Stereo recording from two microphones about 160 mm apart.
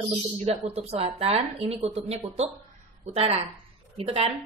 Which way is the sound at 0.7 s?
40° right (ahead or behind).